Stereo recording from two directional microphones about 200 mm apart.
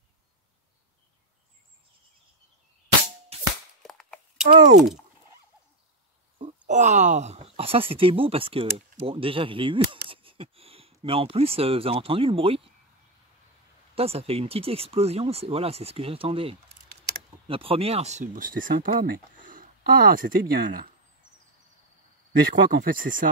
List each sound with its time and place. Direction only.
3.3 s music: 30° right (ahead or behind)
3.8 s cap gun: centre (ahead or behind)
4.5 s speech: 40° right (ahead or behind)
6.7 s speech: 35° right (ahead or behind)
13.9 s speech: 30° right (ahead or behind)
22.7 s speech: 45° right (ahead or behind)